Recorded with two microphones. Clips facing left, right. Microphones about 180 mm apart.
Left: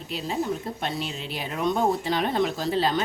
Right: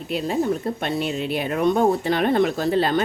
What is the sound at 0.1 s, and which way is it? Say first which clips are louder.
Speech: right 6 dB; 55° right (ahead or behind).